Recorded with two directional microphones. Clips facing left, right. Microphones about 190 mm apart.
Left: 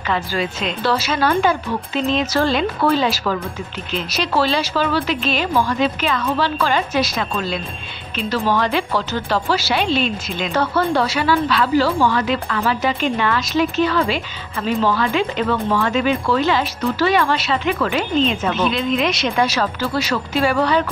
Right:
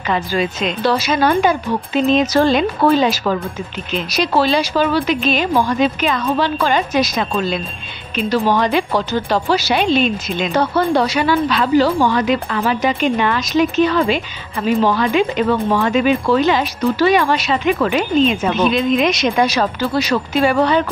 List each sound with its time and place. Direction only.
0.1 s speech: 20° right (ahead or behind)